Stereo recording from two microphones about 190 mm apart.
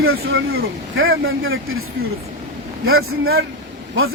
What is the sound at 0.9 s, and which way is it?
A man's voice, 90° right.